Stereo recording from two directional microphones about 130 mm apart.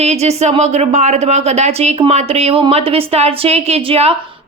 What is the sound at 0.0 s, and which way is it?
A woman's voice, 55° right (ahead or behind).